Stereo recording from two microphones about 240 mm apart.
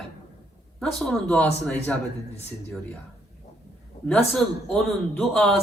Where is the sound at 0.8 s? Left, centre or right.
Centre.